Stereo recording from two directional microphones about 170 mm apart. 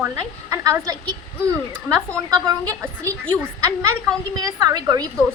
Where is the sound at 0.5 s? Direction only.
20° right (ahead or behind).